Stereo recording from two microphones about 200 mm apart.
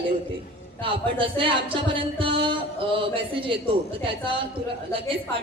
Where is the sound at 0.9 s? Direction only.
25° right (ahead or behind).